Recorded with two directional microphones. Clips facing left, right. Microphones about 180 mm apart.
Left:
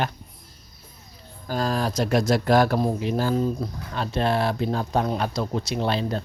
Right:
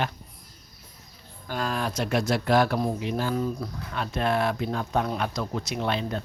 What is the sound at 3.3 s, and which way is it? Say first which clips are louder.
Speech: left 4 dB; 25° left (ahead or behind).